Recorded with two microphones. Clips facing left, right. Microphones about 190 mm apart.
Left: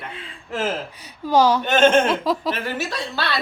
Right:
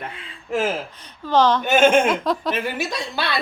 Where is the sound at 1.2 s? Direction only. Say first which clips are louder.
Left 1 dB; 10° left (ahead or behind).